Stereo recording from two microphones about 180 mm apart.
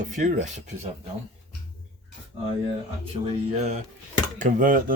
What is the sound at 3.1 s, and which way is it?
Music, 35° right (ahead or behind).